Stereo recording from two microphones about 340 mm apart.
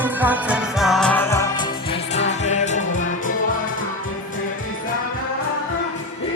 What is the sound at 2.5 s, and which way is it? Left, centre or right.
Music, centre.